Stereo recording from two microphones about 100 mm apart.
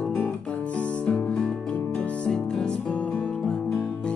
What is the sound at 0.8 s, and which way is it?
Music, 10° left (ahead or behind).